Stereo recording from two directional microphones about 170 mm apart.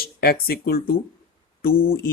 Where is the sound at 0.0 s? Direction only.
65° left (ahead or behind).